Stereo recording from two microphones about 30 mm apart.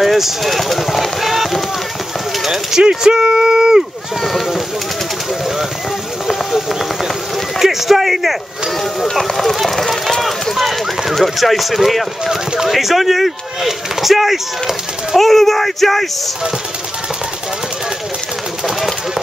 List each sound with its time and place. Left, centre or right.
0.0 s speech: centre
2.4 s a sound: centre
3.1 s a sound: right
4.3 s speech: centre
7.3 s a sound: centre
9.3 s speech: centre
9.6 s run: centre
10.5 s speech: centre
15.1 s speech: centre